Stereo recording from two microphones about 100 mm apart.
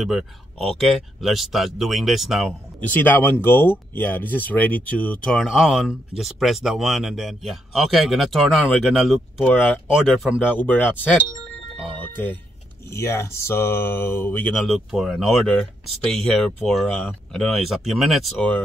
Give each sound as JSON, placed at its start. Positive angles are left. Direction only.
{"t": 0.0, "sound": "speech", "side_deg": -5}
{"t": 2.9, "sound": "speech", "side_deg": 20}
{"t": 9.4, "sound": "speech", "side_deg": 15}
{"t": 10.0, "sound": "speech", "side_deg": 0}
{"t": 10.6, "sound": "speech", "side_deg": 20}
{"t": 12.9, "sound": "speech", "side_deg": 30}
{"t": 14.5, "sound": "speech", "side_deg": 0}
{"t": 15.4, "sound": "speech", "side_deg": 10}